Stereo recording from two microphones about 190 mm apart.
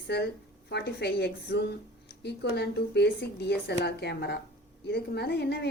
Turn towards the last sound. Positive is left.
turn(degrees=60)  # may be behind; listen again after turning